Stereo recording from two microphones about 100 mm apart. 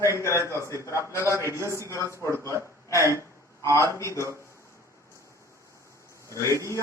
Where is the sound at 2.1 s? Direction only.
30° right (ahead or behind).